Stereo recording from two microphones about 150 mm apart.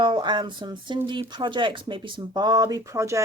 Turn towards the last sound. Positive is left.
turn(degrees=-20)  # may be behind; listen again after turning